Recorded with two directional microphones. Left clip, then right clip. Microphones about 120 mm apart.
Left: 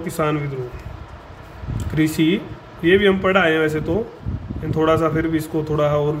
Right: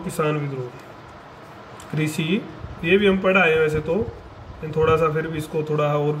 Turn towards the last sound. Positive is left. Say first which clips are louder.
# left 3 dB
turn(degrees=50)  # may be behind; listen again after turning